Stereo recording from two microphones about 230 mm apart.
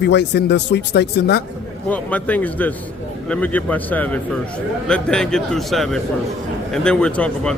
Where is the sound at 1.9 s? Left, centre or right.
Centre.